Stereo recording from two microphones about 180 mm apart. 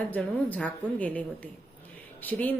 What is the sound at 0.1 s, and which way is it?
A woman's voice, 5° left (ahead or behind).